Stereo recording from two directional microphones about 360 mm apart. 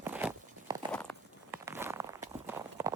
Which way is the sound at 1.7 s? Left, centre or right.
Centre.